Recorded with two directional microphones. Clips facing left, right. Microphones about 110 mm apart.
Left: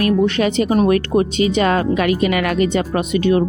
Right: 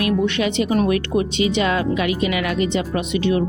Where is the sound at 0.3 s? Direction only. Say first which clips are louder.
Left 3 dB; 40° left (ahead or behind).